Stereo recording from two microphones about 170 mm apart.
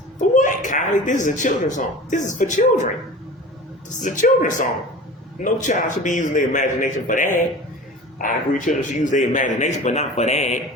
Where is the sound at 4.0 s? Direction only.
50° left (ahead or behind).